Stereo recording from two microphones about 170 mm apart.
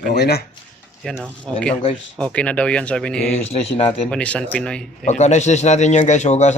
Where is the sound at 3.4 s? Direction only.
35° left (ahead or behind).